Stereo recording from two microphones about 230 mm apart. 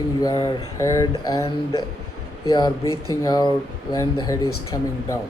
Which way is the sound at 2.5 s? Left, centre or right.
Centre.